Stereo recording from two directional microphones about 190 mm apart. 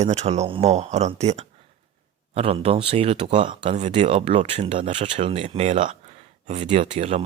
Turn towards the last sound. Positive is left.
turn(degrees=-35)  # may be behind; listen again after turning